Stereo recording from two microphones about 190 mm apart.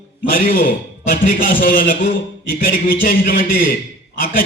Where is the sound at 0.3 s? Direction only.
45° left (ahead or behind).